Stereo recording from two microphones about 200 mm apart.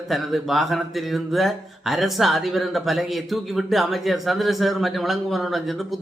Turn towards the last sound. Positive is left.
turn(degrees=0)  # may be behind; listen again after turning